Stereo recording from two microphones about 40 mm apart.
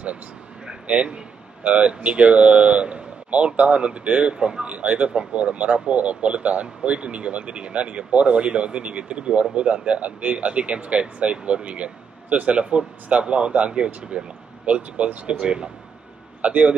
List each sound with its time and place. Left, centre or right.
0.8 s speech: right
4.7 s speech: right
16.3 s a man's voice: right